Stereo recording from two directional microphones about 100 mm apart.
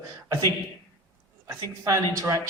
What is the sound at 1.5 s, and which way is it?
Speech, 30° right (ahead or behind).